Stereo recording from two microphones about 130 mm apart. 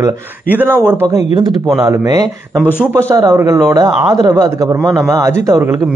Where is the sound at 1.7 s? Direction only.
25° right (ahead or behind).